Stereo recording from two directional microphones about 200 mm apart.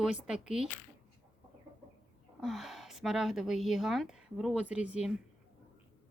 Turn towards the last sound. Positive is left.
turn(degrees=-5)  # may be behind; listen again after turning